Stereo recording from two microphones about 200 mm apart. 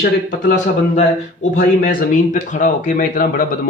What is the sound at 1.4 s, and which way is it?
A man's voice, 40° left (ahead or behind).